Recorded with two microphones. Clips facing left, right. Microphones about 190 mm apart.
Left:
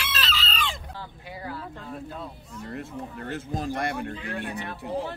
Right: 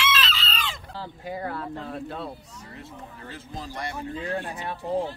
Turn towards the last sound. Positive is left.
turn(degrees=65)  # may be behind; listen again after turning